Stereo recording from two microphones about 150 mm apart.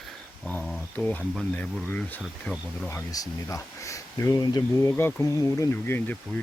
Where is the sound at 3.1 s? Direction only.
20° left (ahead or behind).